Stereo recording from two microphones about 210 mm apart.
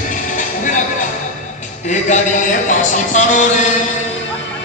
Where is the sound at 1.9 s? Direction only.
35° left (ahead or behind).